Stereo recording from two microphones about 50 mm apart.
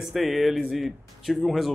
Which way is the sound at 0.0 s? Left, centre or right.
Centre.